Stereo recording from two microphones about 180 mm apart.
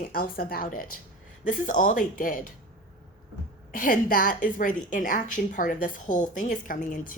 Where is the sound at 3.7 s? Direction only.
50° left (ahead or behind).